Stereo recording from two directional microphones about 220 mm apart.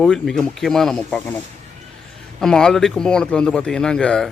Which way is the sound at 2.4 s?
5° left (ahead or behind).